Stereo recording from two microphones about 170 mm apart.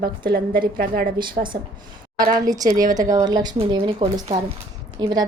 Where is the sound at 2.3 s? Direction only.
20° right (ahead or behind).